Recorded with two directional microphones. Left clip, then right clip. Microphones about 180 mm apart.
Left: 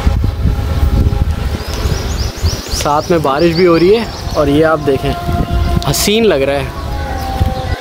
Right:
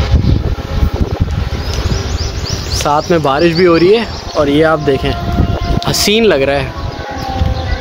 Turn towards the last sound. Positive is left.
turn(degrees=0)  # may be behind; listen again after turning